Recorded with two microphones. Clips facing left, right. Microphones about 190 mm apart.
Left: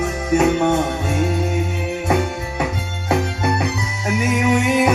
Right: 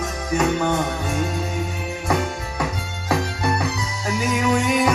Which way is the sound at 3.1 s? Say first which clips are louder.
Left 3 dB; 25° left (ahead or behind).